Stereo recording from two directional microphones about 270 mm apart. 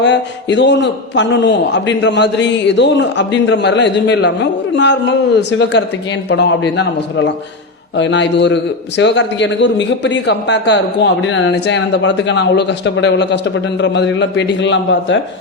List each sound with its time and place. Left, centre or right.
0.0 s a man's voice: left